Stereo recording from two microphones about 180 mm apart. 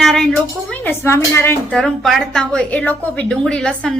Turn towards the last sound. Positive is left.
turn(degrees=5)  # may be behind; listen again after turning